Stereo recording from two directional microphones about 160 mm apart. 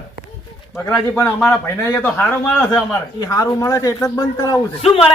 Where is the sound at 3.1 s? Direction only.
20° left (ahead or behind).